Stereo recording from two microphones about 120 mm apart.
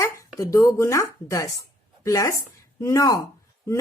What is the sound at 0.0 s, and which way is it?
Speech, 25° left (ahead or behind).